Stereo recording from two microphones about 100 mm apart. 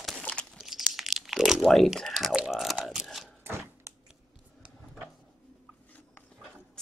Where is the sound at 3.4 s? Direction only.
25° right (ahead or behind).